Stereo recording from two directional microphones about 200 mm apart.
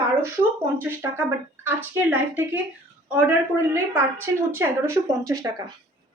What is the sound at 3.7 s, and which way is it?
Speech, 10° right (ahead or behind).